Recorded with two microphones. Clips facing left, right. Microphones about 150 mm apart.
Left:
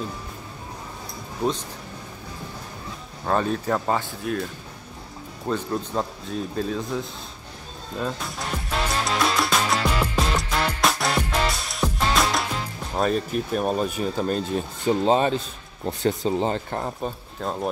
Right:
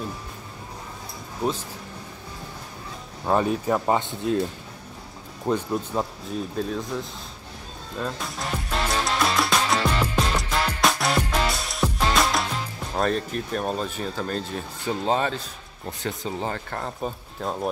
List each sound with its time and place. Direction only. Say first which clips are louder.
3.3 s speech: right 1 dB; 15° right (ahead or behind)
5.5 s speech: right 1 dB; 10° right (ahead or behind)
8.0 s music: left 1 dB; centre (ahead or behind)
12.9 s speech: left 2 dB; 5° left (ahead or behind); by 15.4 s 20° left (ahead or behind)
16.0 s speech: left 7 dB; 30° left (ahead or behind)
17.0 s speech: left 1 dB; centre (ahead or behind)